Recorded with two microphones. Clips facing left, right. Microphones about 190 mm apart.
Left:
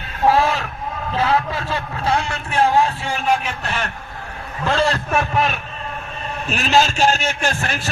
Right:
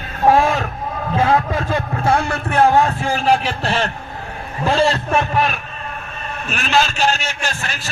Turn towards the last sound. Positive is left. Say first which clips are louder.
# left 3 dB
turn(degrees=50)  # may be behind; listen again after turning